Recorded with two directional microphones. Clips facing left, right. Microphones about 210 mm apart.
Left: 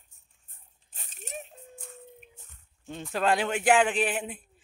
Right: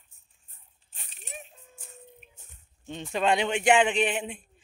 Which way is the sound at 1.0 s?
45° left (ahead or behind).